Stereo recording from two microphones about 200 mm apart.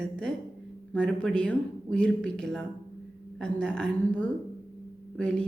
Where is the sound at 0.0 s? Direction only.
5° left (ahead or behind).